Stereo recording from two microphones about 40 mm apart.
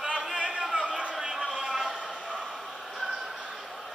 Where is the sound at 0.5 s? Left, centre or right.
Centre.